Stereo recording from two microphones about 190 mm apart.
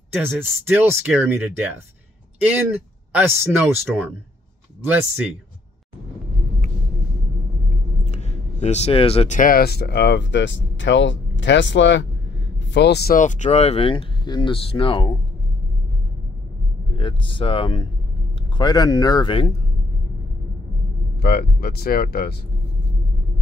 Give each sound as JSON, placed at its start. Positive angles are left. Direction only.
{"t": 0.1, "sound": "speech", "side_deg": -10}
{"t": 8.0, "sound": "a sound", "side_deg": 35}
{"t": 9.4, "sound": "speech", "side_deg": 50}
{"t": 16.9, "sound": "speech", "side_deg": 30}
{"t": 21.2, "sound": "speech", "side_deg": 55}